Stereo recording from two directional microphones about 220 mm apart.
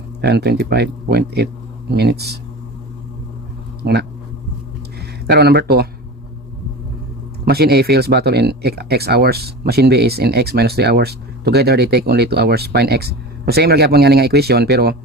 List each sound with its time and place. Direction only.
0.2 s speech: 50° right (ahead or behind)
4.9 s speech: 45° right (ahead or behind)
7.4 s speech: 45° right (ahead or behind)